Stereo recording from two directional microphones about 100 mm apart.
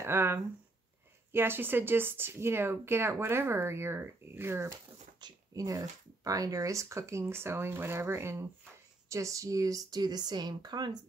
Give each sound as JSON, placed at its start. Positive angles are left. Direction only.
{"t": 0.0, "sound": "speech", "side_deg": -25}
{"t": 5.2, "sound": "speech", "side_deg": -35}